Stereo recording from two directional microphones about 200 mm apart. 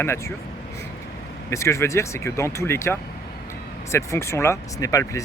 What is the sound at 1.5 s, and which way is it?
Speech, 15° left (ahead or behind).